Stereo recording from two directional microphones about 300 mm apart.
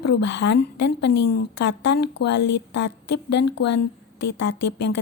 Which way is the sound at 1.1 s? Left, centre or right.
Left.